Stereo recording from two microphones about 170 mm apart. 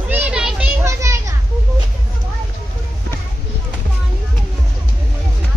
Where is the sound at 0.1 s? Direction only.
5° right (ahead or behind).